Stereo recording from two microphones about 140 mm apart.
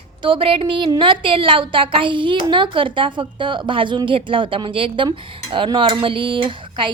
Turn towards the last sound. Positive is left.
turn(degrees=-35)  # may be behind; listen again after turning